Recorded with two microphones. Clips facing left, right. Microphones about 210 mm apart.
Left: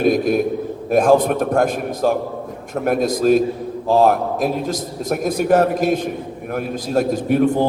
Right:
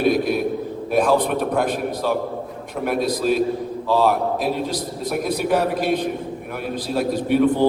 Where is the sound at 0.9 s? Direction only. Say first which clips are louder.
Left 4 dB; 45° left (ahead or behind).